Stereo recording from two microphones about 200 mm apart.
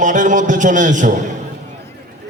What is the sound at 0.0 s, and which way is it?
A man's voice, 40° right (ahead or behind).